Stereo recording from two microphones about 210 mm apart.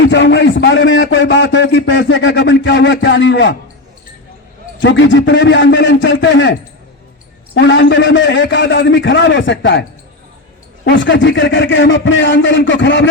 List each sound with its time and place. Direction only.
0.0 s a man's voice: 55° left (ahead or behind)
4.8 s a man's voice: 60° left (ahead or behind)
7.5 s a man's voice: 60° left (ahead or behind)
10.8 s a man's voice: 60° left (ahead or behind)